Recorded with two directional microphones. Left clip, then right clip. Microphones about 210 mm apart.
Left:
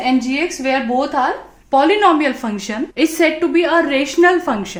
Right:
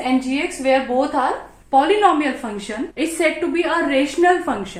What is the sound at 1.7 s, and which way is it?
A woman's voice, 50° left (ahead or behind).